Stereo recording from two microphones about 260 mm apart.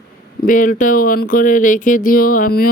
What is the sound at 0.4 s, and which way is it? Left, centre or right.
Speech, left.